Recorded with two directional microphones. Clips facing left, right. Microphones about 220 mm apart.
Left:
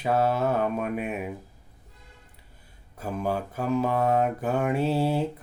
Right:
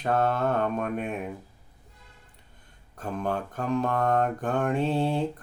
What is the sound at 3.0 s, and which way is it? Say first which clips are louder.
Mantra: left 1 dB; 5° left (ahead or behind).